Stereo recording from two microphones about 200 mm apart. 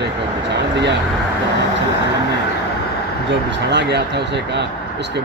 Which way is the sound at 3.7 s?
60° right (ahead or behind).